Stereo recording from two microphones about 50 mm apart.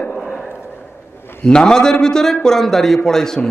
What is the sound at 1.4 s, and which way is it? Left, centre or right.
Speech, centre.